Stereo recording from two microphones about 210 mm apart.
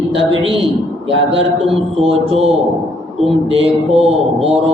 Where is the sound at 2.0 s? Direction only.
30° right (ahead or behind).